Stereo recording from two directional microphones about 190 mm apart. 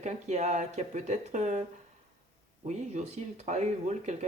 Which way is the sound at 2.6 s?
35° right (ahead or behind).